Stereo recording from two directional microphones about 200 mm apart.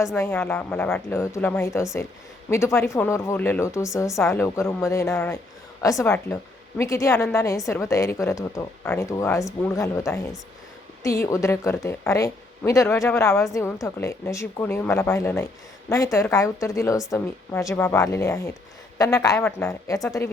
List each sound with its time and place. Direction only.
0.2 s speech: 10° left (ahead or behind)